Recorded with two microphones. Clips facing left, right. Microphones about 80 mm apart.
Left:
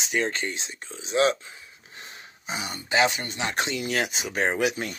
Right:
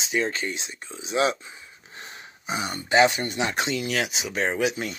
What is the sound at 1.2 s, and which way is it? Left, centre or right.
Speech, centre.